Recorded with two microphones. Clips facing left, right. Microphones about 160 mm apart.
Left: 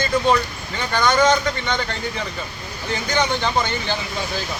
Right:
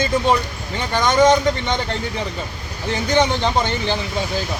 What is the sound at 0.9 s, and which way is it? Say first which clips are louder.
Speech: right 3 dB; 25° right (ahead or behind).